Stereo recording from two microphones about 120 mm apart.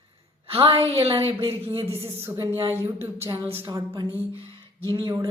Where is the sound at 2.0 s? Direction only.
20° right (ahead or behind).